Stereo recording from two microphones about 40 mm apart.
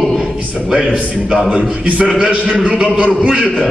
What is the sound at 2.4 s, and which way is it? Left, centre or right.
Speech, right.